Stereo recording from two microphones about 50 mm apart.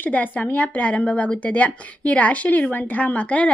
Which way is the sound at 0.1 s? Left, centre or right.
Left.